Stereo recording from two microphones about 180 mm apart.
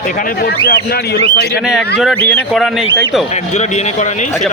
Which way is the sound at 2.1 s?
5° left (ahead or behind).